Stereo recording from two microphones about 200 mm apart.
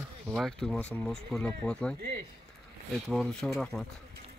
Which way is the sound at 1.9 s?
50° right (ahead or behind).